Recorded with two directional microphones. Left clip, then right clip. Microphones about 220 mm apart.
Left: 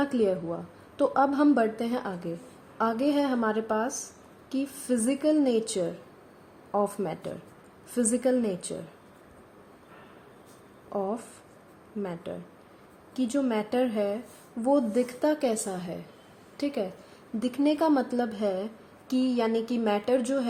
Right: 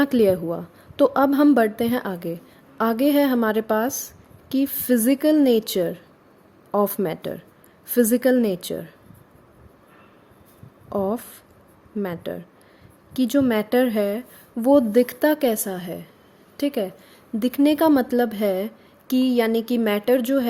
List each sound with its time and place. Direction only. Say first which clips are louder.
0.0 s a woman's voice: right 8 dB; 40° right (ahead or behind)
10.8 s a woman's voice: right 7 dB; 45° right (ahead or behind)